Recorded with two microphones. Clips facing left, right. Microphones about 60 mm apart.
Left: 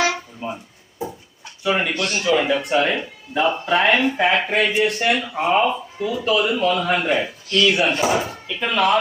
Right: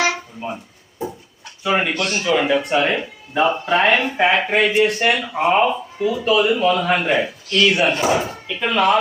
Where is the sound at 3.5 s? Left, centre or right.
Centre.